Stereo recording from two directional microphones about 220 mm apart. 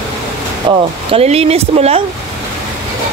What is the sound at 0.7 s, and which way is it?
Speech, 25° right (ahead or behind).